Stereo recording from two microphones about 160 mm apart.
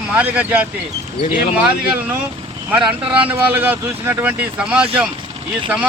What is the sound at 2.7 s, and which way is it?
Speech, 10° right (ahead or behind).